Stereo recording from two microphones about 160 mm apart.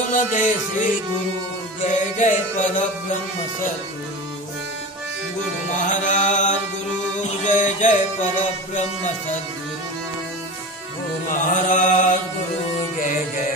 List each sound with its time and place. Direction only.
0.1 s music: 55° left (ahead or behind)
1.9 s music: 50° left (ahead or behind)
5.9 s music: 50° left (ahead or behind)
7.4 s music: 50° left (ahead or behind)
11.4 s music: 50° left (ahead or behind)